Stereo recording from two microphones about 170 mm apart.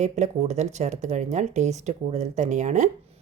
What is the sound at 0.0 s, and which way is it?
Speech, 40° right (ahead or behind).